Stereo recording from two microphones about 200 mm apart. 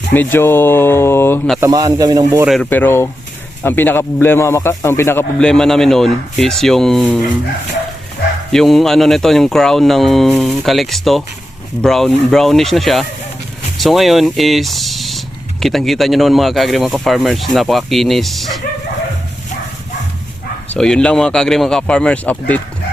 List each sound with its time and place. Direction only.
0.1 s speech: 10° left (ahead or behind)
1.6 s speech: 20° right (ahead or behind)
2.5 s speech: 5° left (ahead or behind)
8.5 s speech: centre (ahead or behind)
20.7 s speech: 5° left (ahead or behind)